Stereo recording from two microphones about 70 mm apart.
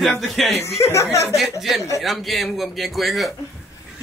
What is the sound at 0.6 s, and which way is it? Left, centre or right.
Speech, left.